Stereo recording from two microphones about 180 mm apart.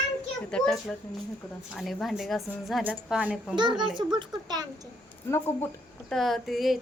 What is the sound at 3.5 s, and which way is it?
A child's voice, 25° right (ahead or behind).